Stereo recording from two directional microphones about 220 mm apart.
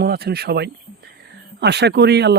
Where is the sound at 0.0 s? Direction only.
45° right (ahead or behind).